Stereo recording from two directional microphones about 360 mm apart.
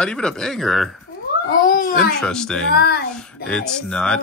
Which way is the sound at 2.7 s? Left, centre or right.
Left.